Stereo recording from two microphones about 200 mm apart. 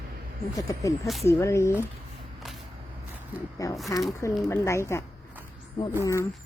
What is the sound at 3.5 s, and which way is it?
A woman's voice, 15° left (ahead or behind).